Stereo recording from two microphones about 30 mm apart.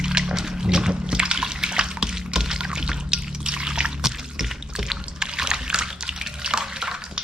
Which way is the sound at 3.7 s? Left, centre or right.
Right.